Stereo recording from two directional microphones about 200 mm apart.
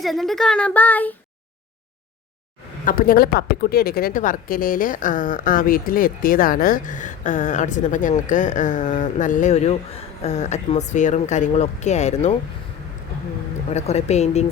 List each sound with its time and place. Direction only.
0.0 s speech: centre (ahead or behind)
2.8 s speech: 45° left (ahead or behind)
13.7 s speech: 35° left (ahead or behind)